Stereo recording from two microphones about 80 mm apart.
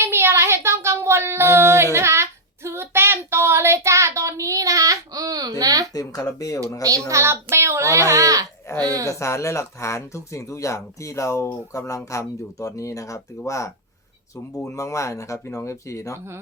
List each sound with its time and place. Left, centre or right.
0.0 s a sound: right
2.6 s child singing: right
5.9 s speech: left
7.1 s a child's voice: right
9.0 s speech: left